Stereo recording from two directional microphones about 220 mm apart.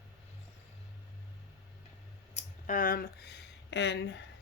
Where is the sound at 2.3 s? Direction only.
35° left (ahead or behind); by 4.2 s 50° left (ahead or behind).